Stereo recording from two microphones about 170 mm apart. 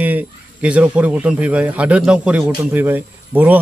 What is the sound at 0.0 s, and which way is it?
Speech, 10° right (ahead or behind).